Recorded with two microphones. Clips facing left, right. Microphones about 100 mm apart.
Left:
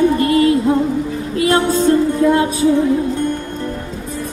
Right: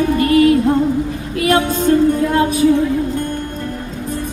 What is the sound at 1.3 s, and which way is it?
Music, 30° left (ahead or behind).